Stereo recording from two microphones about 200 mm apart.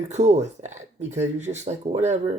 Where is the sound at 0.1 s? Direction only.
35° right (ahead or behind).